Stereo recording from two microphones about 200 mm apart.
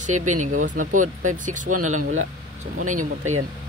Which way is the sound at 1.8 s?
90° right.